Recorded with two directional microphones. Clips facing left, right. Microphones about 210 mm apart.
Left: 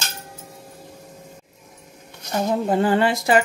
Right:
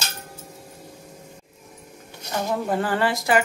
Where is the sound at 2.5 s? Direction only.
25° left (ahead or behind).